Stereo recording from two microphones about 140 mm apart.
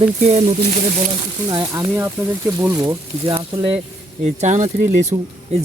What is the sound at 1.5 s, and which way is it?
Speech, 30° right (ahead or behind).